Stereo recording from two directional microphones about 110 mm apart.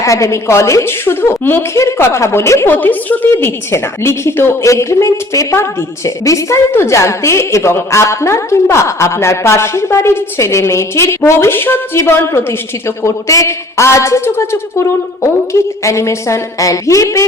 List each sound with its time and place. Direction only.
0.0 s a woman's voice: 30° left (ahead or behind)